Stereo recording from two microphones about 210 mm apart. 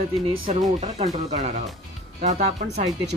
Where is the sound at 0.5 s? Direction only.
30° right (ahead or behind).